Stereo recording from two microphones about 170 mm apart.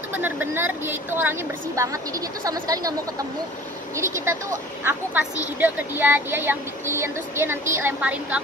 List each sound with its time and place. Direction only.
0.1 s a woman's voice: 10° right (ahead or behind)
5.6 s a woman's voice: 10° right (ahead or behind)